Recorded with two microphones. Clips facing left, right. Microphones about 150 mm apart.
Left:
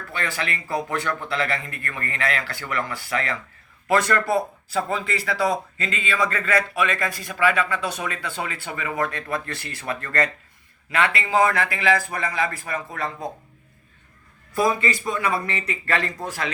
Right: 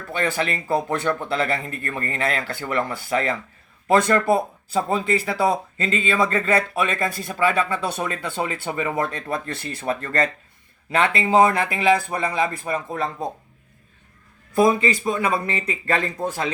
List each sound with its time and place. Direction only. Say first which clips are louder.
0.2 s speech: right 5 dB; 30° right (ahead or behind)
14.5 s speech: right 4 dB; 20° right (ahead or behind)